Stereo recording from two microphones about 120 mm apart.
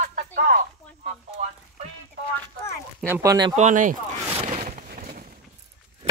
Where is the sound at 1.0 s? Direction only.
70° right (ahead or behind).